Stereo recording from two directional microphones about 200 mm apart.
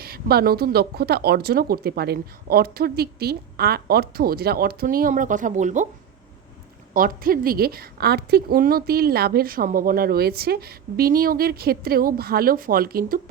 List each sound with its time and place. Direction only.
0.0 s a woman's voice: 50° right (ahead or behind)
6.9 s a woman's voice: 45° right (ahead or behind)